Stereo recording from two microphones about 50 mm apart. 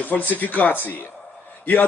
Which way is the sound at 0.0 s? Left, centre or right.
Left.